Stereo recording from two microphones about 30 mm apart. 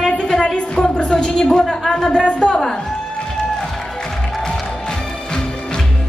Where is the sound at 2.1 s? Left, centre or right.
Left.